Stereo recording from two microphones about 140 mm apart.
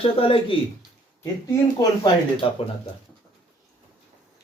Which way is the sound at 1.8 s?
35° left (ahead or behind).